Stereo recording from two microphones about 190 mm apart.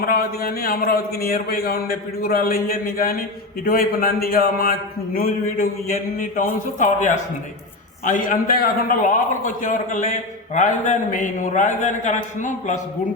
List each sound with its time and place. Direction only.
0.0 s a man's voice: 50° left (ahead or behind)